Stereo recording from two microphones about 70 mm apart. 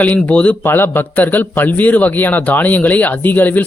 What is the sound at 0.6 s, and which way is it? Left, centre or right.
Speech, left.